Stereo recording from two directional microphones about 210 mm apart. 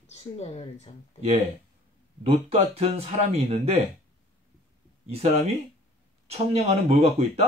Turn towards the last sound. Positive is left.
turn(degrees=-30)  # may be behind; listen again after turning